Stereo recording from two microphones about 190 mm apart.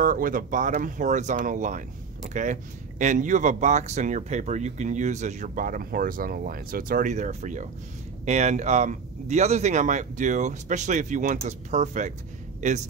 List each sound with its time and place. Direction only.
0.0 s a man's voice: 45° right (ahead or behind)